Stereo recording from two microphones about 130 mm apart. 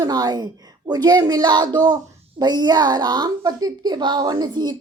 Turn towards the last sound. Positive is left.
turn(degrees=-35)  # may be behind; listen again after turning